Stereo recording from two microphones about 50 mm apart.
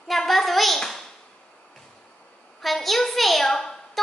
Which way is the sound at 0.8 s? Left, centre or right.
Centre.